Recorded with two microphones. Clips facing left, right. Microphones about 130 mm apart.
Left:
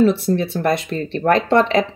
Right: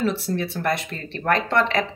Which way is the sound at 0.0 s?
20° left (ahead or behind).